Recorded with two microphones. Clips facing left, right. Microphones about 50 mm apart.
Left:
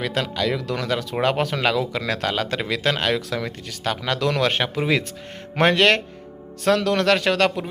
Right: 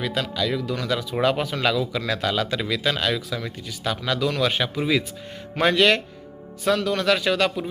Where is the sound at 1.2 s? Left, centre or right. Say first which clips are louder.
Left 1 dB; left.